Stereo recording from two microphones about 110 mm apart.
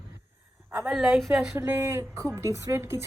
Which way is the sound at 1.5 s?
20° right (ahead or behind).